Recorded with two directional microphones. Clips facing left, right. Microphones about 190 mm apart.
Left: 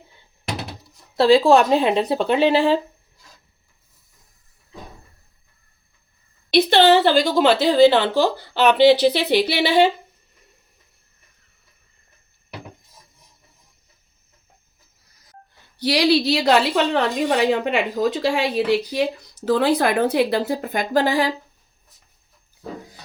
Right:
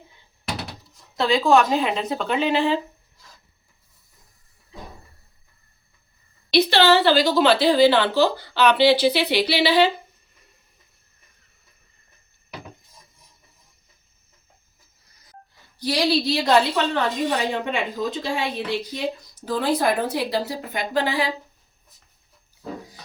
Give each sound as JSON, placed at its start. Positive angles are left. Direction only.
{"t": 1.1, "sound": "speech", "side_deg": 30}
{"t": 6.5, "sound": "speech", "side_deg": 55}
{"t": 15.8, "sound": "a woman's voice", "side_deg": 85}